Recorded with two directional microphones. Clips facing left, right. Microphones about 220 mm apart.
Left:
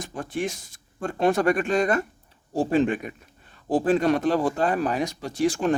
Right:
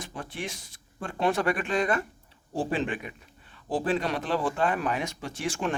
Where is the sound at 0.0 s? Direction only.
45° left (ahead or behind).